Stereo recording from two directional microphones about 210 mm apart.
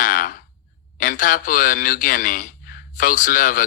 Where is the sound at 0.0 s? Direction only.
40° left (ahead or behind).